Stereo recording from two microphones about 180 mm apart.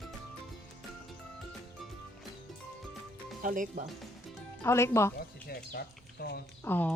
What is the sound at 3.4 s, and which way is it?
Speech, 45° right (ahead or behind).